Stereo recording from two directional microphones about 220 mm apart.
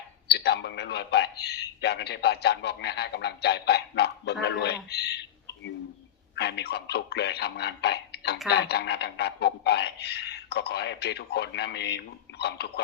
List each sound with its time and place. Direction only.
0.3 s a man's voice: 50° left (ahead or behind)
6.3 s a man's voice: 50° left (ahead or behind)